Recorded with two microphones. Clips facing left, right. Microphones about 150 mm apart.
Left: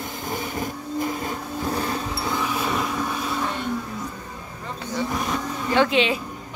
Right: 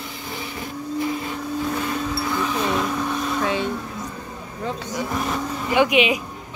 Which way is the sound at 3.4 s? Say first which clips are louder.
Right 5 dB; 90° right.